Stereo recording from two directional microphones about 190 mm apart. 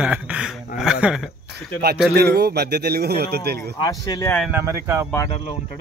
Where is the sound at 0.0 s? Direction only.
5° right (ahead or behind).